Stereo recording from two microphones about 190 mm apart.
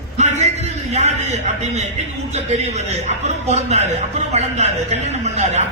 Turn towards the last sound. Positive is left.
turn(degrees=-35)  # may be behind; listen again after turning